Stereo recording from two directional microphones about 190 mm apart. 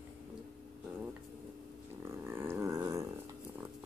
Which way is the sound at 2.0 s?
15° right (ahead or behind).